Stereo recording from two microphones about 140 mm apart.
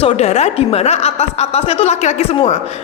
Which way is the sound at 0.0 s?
50° left (ahead or behind).